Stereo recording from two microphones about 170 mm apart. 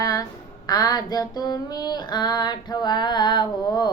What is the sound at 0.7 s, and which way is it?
Speech, 20° left (ahead or behind).